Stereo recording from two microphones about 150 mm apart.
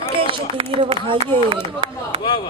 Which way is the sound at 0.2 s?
35° right (ahead or behind).